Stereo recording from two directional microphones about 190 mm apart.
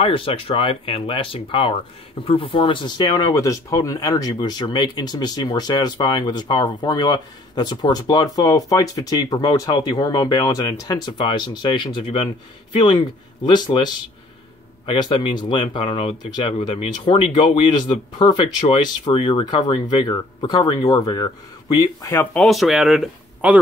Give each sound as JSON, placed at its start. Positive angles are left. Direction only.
{"t": 0.0, "sound": "speech", "side_deg": 30}